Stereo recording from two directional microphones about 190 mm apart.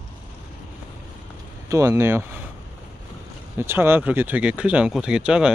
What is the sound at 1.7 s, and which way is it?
Speech, 15° right (ahead or behind).